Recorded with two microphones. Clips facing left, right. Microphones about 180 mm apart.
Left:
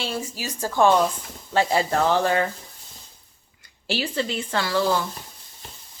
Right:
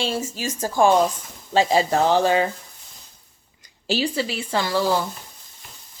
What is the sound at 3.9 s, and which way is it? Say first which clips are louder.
Speech: right 2 dB; 10° right (ahead or behind).